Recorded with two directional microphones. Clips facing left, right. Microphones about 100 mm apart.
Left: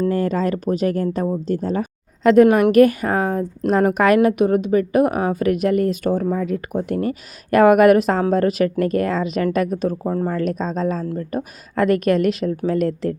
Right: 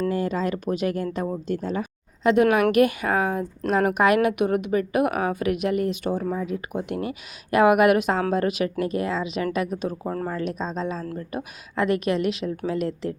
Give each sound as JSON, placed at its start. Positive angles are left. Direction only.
{"t": 0.1, "sound": "a woman's voice", "side_deg": 45}